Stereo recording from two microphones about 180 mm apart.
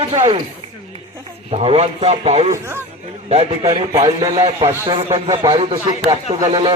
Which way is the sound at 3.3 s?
35° right (ahead or behind).